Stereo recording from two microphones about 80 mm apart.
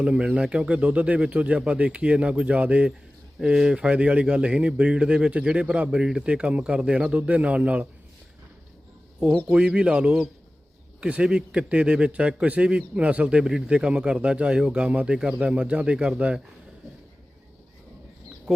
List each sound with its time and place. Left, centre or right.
0.0 s a man's voice: centre
9.5 s a man's voice: centre
18.5 s speech: centre